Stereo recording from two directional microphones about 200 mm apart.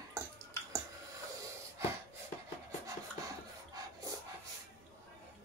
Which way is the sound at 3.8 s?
20° right (ahead or behind).